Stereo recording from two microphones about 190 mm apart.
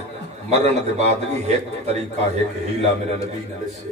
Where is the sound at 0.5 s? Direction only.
35° right (ahead or behind).